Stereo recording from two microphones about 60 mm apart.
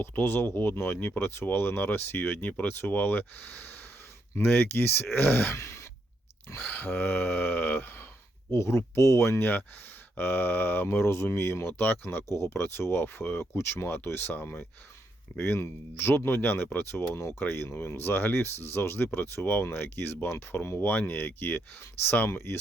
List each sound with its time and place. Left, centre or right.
0.0 s speech: left
5.5 s a sound: left
6.7 s speech: left
8.5 s speech: left
9.4 s speech: left
12.3 s speech: left
15.4 s speech: left